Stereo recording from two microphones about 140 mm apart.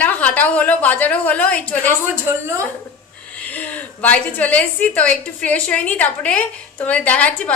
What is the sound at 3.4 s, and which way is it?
A woman's voice, 10° left (ahead or behind).